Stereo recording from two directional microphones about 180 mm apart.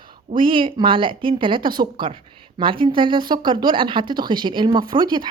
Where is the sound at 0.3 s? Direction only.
30° right (ahead or behind).